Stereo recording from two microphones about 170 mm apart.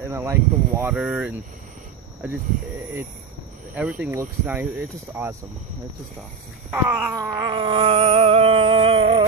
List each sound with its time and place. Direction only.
0.1 s speech: 15° right (ahead or behind)
3.7 s speech: 5° right (ahead or behind)
6.7 s groan: 5° right (ahead or behind)
7.4 s a sound: 30° right (ahead or behind)